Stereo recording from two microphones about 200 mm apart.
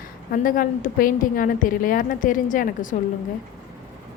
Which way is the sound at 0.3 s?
45° left (ahead or behind).